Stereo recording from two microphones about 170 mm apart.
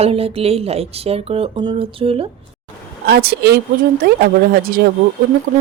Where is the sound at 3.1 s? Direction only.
70° right (ahead or behind).